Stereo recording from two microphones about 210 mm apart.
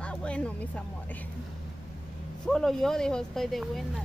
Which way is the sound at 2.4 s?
Centre (ahead or behind).